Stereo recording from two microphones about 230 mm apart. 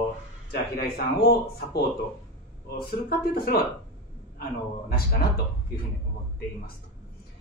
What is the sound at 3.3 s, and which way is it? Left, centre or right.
Speech, left.